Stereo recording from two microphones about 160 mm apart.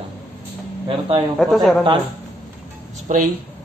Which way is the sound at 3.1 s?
50° right (ahead or behind).